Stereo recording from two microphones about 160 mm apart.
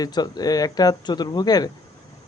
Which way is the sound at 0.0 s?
25° left (ahead or behind).